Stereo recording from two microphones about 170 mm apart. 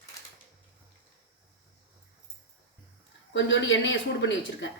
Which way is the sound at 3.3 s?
90° left.